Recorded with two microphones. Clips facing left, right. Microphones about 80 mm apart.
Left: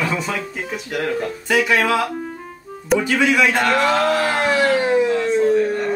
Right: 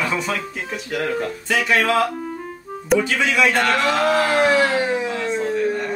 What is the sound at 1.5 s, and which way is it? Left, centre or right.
Speech, centre.